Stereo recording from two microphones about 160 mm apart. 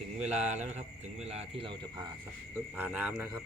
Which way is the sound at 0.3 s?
45° right (ahead or behind).